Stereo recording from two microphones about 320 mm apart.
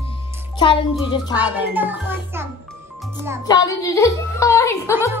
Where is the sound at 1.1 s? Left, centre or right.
Centre.